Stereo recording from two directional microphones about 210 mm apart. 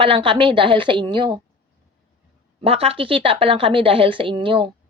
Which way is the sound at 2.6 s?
30° right (ahead or behind).